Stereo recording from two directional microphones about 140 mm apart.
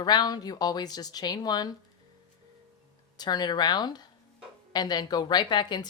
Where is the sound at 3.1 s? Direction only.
30° left (ahead or behind).